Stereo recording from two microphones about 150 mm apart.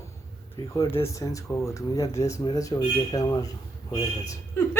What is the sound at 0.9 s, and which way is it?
Speech, 40° left (ahead or behind).